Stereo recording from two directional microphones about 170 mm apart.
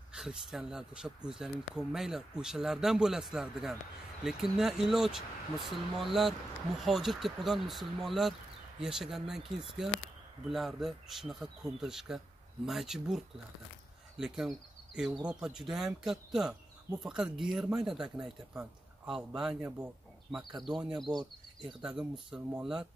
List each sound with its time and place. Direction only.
0.1 s speech: 5° right (ahead or behind)
21.2 s speech: 25° right (ahead or behind)
22.3 s speech: 5° right (ahead or behind)